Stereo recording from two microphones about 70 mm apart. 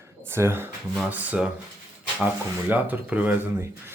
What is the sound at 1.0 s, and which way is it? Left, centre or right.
Speech, right.